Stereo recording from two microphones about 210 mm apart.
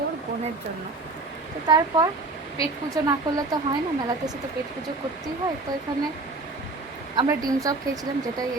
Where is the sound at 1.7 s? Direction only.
20° right (ahead or behind).